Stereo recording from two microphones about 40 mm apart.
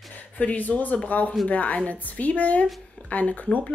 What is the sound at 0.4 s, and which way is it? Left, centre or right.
A man's voice, left.